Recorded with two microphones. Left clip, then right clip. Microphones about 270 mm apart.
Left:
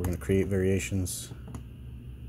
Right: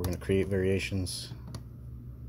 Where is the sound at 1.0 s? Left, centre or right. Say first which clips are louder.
Even; left.